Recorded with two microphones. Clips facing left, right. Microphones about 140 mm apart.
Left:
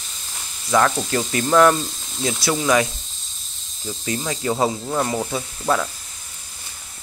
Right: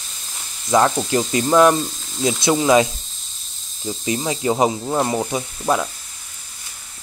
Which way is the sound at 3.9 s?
20° right (ahead or behind).